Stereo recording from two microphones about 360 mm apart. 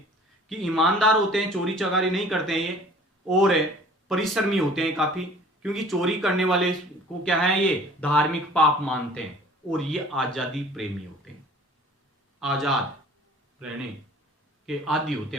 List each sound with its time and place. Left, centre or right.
0.4 s speech: centre
8.0 s speech: centre
12.4 s speech: centre
14.7 s speech: centre